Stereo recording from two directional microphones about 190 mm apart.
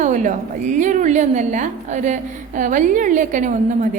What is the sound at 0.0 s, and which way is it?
A woman's voice, 40° right (ahead or behind).